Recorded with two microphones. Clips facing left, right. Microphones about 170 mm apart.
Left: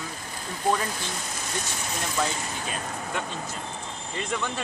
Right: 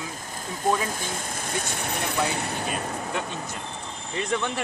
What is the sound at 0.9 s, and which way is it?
Speech, 50° right (ahead or behind).